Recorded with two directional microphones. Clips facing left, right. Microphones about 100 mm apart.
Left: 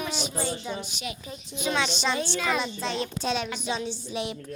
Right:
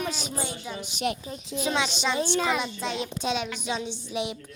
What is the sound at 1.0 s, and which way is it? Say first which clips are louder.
Speech: right 7 dB; 55° right (ahead or behind).